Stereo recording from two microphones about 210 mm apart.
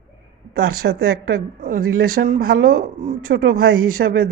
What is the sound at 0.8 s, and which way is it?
A woman's voice, 50° right (ahead or behind).